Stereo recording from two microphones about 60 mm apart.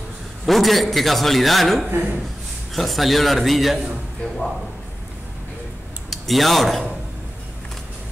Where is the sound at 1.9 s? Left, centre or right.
Right.